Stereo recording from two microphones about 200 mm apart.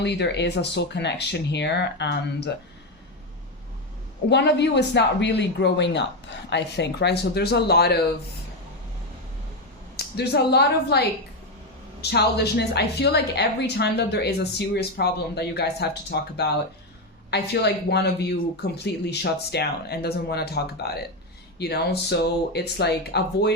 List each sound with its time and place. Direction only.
0.0 s a woman's voice: 60° left (ahead or behind)
4.3 s a woman's voice: 60° left (ahead or behind)
10.2 s a woman's voice: 55° left (ahead or behind)
12.0 s a woman's voice: 55° left (ahead or behind)